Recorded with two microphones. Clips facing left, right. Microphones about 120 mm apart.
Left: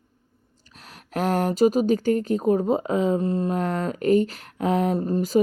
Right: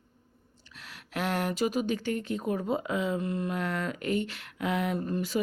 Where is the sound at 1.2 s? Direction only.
40° left (ahead or behind).